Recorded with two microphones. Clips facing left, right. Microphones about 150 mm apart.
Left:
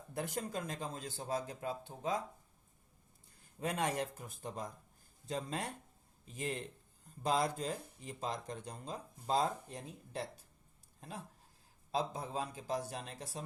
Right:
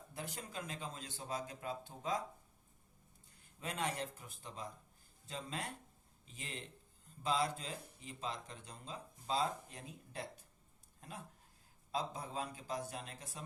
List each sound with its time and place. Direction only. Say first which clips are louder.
0.1 s speech: left 8 dB; 50° left (ahead or behind); by 2.1 s 30° left (ahead or behind)
3.6 s speech: left 5 dB; 45° left (ahead or behind)
11.9 s speech: left 4 dB; 30° left (ahead or behind)